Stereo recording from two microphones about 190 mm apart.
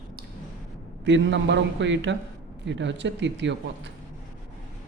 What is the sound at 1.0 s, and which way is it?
Speech, 70° right (ahead or behind).